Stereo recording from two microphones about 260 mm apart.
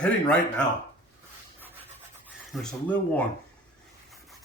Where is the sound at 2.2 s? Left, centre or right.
Centre.